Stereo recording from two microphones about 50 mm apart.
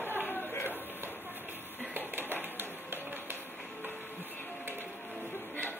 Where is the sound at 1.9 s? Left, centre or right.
Right.